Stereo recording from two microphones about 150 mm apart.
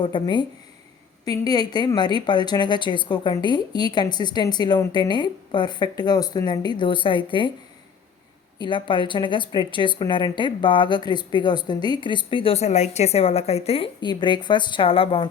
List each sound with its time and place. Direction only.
0.0 s a woman's voice: 30° left (ahead or behind)
8.6 s a woman's voice: 35° left (ahead or behind)